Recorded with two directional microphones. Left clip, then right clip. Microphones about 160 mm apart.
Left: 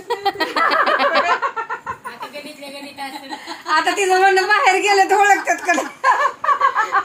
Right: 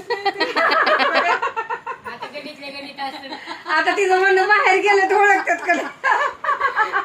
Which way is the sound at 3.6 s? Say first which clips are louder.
Left 1 dB; 65° left (ahead or behind).